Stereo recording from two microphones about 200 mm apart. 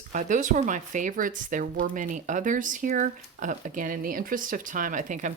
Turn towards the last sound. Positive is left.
turn(degrees=-40)  # may be behind; listen again after turning